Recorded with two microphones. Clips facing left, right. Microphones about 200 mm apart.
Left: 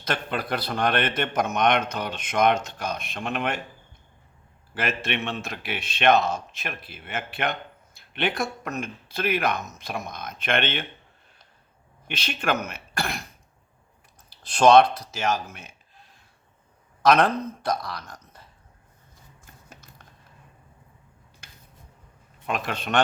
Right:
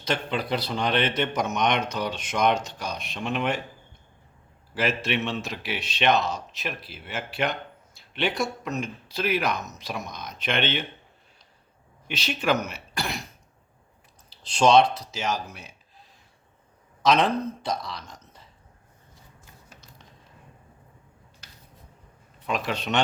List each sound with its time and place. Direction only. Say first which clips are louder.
0.0 s a man's voice: right 1 dB; 55° left (ahead or behind)
4.7 s a man's voice: right 2 dB; 55° left (ahead or behind)
7.9 s a sound: even; 55° left (ahead or behind)
8.8 s a man's voice: left 2 dB; 55° left (ahead or behind)
12.0 s a man's voice: right 2 dB; 55° left (ahead or behind)
14.3 s speech: left 3 dB; 55° left (ahead or behind)
17.1 s a man's voice: left 2 dB; 55° left (ahead or behind)
22.4 s a man's voice: right 1 dB; 50° left (ahead or behind)